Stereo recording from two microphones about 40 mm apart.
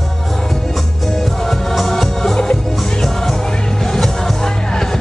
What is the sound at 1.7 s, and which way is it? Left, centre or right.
Music, centre.